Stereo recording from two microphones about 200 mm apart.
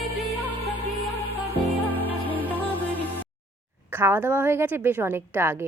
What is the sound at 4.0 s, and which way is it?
A woman's voice, 10° right (ahead or behind).